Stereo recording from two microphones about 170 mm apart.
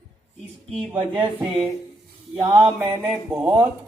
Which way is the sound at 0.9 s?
30° right (ahead or behind).